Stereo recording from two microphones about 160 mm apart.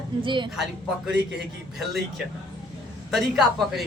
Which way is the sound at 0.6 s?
5° right (ahead or behind).